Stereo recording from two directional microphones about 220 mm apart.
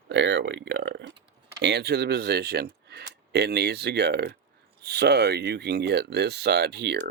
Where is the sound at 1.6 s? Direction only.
50° right (ahead or behind).